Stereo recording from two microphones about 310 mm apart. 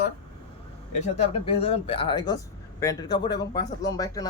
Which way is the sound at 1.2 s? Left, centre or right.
Centre.